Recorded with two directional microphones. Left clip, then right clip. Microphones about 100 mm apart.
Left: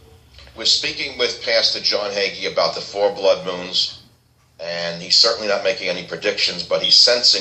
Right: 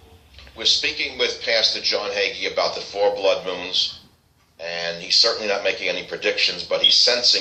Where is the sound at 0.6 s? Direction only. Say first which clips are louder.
Left 1 dB; 35° left (ahead or behind).